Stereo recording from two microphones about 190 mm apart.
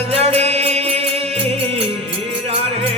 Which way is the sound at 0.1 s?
30° right (ahead or behind).